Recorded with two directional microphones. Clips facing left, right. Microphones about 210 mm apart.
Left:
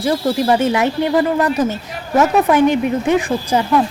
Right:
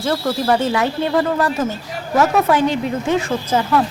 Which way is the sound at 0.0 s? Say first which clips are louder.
Left 3 dB; 15° left (ahead or behind).